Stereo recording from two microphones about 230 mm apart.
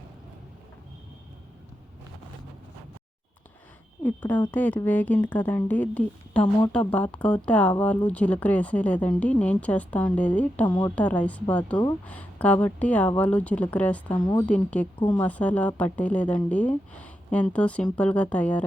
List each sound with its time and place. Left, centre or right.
4.0 s a woman's voice: centre
10.7 s a woman's voice: centre
10.9 s a woman's voice: centre
14.2 s a woman's voice: centre
14.4 s speech: centre
15.0 s a woman's voice: centre
15.3 s speech: centre